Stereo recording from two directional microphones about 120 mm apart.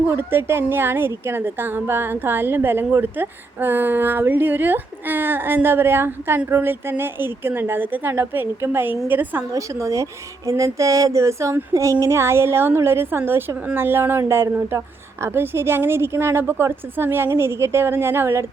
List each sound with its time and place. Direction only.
0.1 s a woman's voice: 20° right (ahead or behind)